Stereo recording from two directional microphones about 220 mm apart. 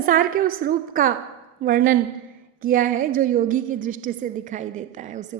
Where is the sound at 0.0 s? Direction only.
40° right (ahead or behind).